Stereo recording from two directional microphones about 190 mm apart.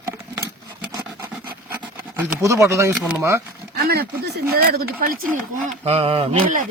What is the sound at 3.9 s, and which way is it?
Speech, 60° right (ahead or behind).